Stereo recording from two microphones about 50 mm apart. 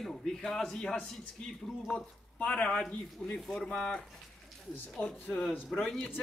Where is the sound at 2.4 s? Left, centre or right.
Left.